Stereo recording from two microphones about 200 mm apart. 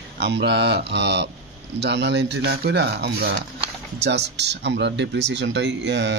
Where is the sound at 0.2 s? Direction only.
55° right (ahead or behind).